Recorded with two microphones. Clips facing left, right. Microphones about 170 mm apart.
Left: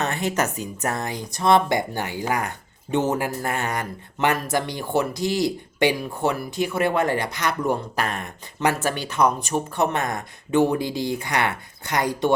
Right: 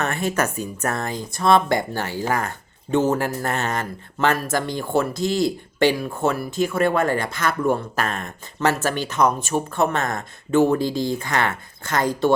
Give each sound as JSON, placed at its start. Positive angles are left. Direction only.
{"t": 0.0, "sound": "speech", "side_deg": 20}